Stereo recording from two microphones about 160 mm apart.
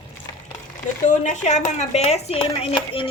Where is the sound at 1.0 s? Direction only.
50° left (ahead or behind).